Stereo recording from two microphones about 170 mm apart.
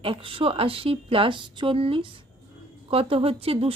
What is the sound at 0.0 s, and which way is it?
Speech, 30° right (ahead or behind).